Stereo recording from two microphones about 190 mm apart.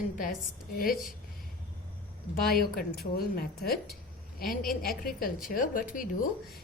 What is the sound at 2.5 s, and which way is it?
Speech, 55° left (ahead or behind).